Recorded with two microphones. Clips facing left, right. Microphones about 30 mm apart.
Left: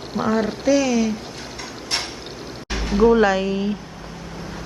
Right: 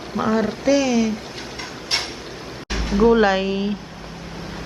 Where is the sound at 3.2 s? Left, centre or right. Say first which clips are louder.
Even; centre.